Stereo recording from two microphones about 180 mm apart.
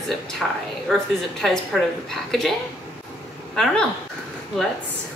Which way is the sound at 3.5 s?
5° left (ahead or behind).